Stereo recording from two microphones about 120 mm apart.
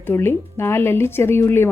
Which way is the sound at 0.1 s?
20° left (ahead or behind).